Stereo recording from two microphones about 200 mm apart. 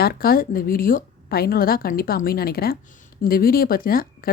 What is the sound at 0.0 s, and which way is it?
Speech, 50° left (ahead or behind).